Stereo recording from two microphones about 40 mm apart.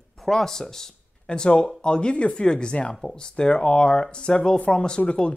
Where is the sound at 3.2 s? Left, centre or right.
Left.